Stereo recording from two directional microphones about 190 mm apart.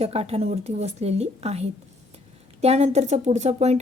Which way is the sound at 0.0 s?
35° right (ahead or behind).